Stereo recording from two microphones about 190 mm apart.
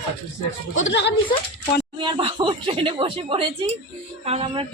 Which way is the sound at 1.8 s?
25° right (ahead or behind).